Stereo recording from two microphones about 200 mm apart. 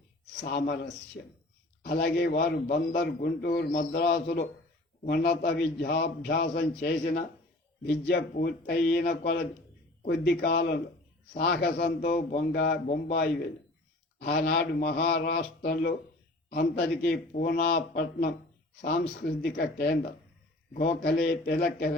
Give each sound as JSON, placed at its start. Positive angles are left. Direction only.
{"t": 0.4, "sound": "a man's voice", "side_deg": 50}
{"t": 14.2, "sound": "a man's voice", "side_deg": 55}